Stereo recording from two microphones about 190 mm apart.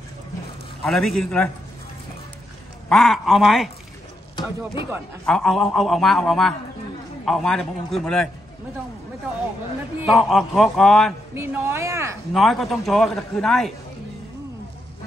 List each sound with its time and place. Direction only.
0.8 s a man's voice: centre (ahead or behind)
2.9 s a man's voice: centre (ahead or behind)
5.2 s a man's voice: centre (ahead or behind)
10.0 s a man's voice: centre (ahead or behind)
11.3 s speech: 10° right (ahead or behind)
12.3 s a man's voice: centre (ahead or behind)